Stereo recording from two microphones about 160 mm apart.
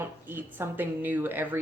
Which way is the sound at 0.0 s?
15° right (ahead or behind).